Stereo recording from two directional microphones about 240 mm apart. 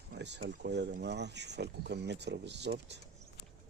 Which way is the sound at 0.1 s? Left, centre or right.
Right.